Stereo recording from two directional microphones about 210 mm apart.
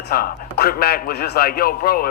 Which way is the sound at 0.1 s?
45° left (ahead or behind).